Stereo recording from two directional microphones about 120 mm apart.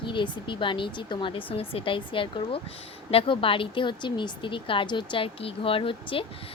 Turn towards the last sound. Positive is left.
turn(degrees=45)  # may be behind; listen again after turning